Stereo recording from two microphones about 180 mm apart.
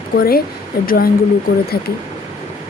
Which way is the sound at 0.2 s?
55° left (ahead or behind).